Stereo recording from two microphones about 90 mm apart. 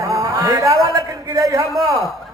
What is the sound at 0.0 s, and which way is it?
A man's voice, 40° right (ahead or behind).